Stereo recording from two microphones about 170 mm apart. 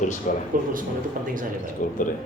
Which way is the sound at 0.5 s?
55° right (ahead or behind).